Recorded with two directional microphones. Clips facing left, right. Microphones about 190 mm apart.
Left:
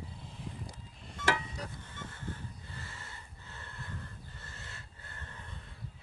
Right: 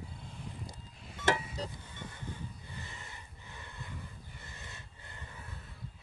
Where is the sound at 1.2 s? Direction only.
25° right (ahead or behind).